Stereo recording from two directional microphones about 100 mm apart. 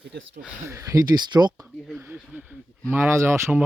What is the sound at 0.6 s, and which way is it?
Speech, 30° right (ahead or behind).